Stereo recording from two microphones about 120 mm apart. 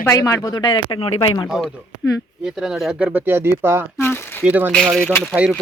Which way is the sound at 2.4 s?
5° right (ahead or behind).